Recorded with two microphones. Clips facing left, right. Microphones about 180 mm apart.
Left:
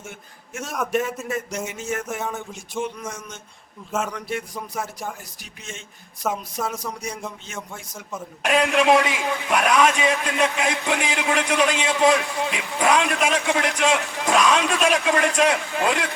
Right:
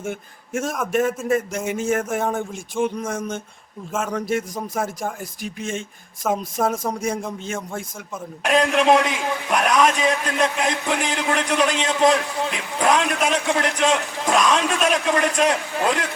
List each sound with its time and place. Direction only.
0.0 s speech: 50° right (ahead or behind)
6.2 s speech: centre (ahead or behind)
6.6 s speech: 50° right (ahead or behind)
8.4 s a man's voice: centre (ahead or behind)